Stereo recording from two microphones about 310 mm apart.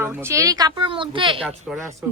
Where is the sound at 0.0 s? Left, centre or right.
Centre.